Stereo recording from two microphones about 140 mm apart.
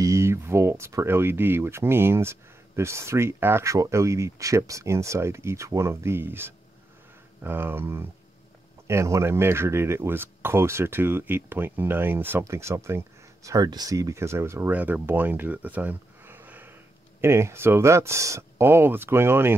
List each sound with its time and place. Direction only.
0.0 s speech: 20° right (ahead or behind)